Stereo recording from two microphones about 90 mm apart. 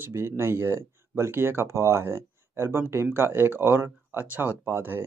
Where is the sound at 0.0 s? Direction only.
25° right (ahead or behind).